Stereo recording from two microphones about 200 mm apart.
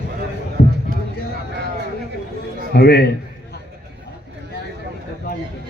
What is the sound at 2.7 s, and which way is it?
Speech, 55° left (ahead or behind).